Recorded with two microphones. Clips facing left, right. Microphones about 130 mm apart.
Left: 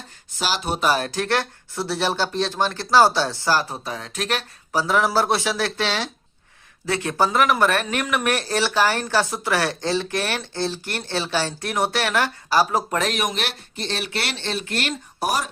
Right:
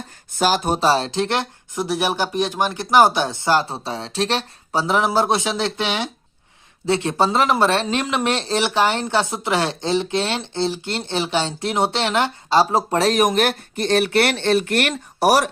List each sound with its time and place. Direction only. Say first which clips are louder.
0.3 s speech: right 6 dB; 45° right (ahead or behind)
0.8 s speech: right 3 dB; 30° right (ahead or behind); by 15.4 s 75° right (ahead or behind)